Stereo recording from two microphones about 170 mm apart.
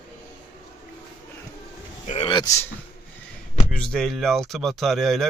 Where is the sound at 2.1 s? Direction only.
30° left (ahead or behind).